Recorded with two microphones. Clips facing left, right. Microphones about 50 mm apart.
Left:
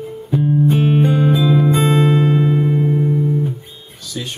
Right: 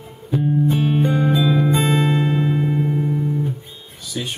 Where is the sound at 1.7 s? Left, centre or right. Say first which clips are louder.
Left 4 dB; left.